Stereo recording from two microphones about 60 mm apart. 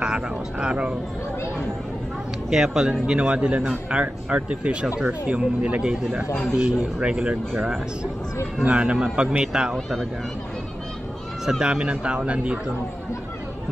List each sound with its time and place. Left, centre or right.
0.0 s speech: centre
2.5 s speech: centre
2.9 s speech: right
8.6 s speech: right
11.6 s speech: centre